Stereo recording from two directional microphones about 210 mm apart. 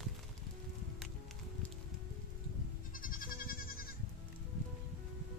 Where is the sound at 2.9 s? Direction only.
40° left (ahead or behind).